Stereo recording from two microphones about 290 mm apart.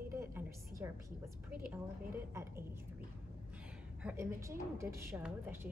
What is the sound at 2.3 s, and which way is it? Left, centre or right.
Speech, centre.